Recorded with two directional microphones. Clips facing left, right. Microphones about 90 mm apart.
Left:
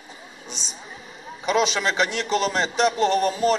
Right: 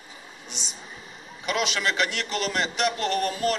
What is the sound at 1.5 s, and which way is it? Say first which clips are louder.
A man's voice: left 5 dB; 25° left (ahead or behind).